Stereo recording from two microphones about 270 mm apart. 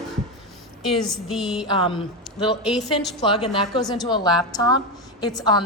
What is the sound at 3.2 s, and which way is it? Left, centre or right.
A woman's voice, centre.